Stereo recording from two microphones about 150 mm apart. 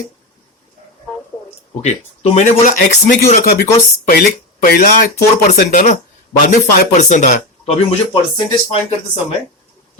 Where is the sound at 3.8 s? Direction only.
75° left (ahead or behind).